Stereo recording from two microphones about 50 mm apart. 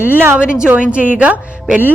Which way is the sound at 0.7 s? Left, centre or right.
Right.